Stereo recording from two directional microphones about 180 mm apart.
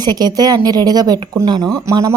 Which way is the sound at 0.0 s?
20° right (ahead or behind).